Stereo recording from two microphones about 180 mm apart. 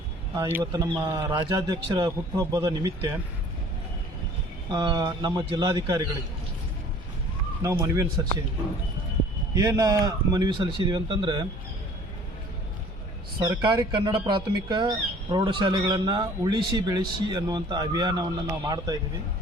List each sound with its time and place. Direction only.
0.3 s speech: 10° right (ahead or behind)
0.6 s speech: 25° right (ahead or behind)
4.7 s speech: 25° right (ahead or behind)
7.6 s speech: 15° right (ahead or behind)
9.6 s speech: 20° right (ahead or behind)
13.4 s speech: 20° right (ahead or behind)